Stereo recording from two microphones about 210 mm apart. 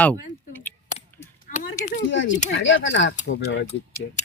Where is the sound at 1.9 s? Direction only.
60° left (ahead or behind).